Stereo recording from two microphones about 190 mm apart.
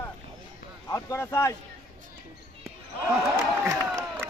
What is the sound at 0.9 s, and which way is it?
Speech, 15° left (ahead or behind).